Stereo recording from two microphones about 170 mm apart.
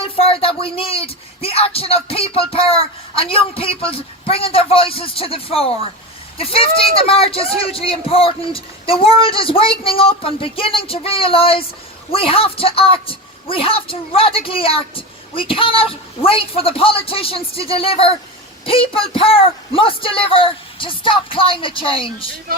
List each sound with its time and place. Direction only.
0.0 s a woman's voice: 35° left (ahead or behind)